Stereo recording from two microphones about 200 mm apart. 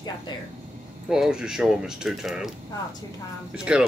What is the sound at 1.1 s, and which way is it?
Speech, 5° right (ahead or behind).